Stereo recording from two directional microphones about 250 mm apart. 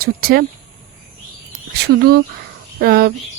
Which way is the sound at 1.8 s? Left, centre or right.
Right.